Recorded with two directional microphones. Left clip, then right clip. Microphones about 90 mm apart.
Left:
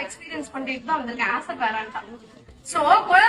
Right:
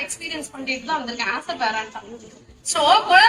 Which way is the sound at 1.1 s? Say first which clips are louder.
Even; 25° right (ahead or behind).